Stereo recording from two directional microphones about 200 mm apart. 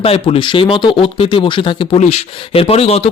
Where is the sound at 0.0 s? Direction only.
30° left (ahead or behind).